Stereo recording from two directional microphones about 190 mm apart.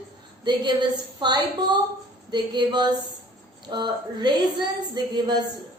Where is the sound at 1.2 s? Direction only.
25° right (ahead or behind).